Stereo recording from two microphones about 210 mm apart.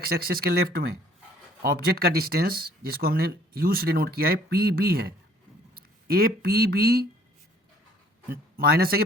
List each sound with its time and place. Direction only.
0.0 s speech: 45° right (ahead or behind)
8.3 s speech: 45° right (ahead or behind)